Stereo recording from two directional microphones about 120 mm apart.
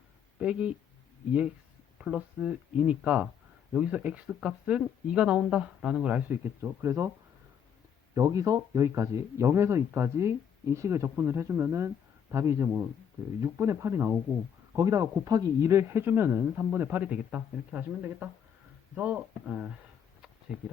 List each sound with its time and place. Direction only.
0.3 s speech: 10° right (ahead or behind)
2.0 s speech: 10° right (ahead or behind)
8.1 s speech: 25° right (ahead or behind); by 19.7 s 5° right (ahead or behind)